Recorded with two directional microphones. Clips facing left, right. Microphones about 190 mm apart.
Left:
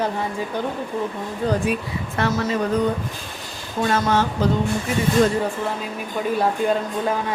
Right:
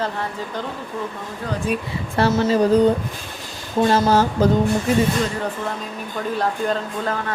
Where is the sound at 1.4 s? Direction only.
25° left (ahead or behind).